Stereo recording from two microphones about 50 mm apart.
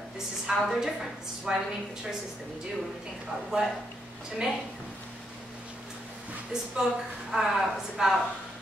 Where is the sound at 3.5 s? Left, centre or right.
Centre.